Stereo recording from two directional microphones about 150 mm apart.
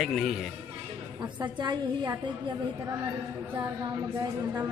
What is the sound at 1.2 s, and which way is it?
Speech, 30° right (ahead or behind).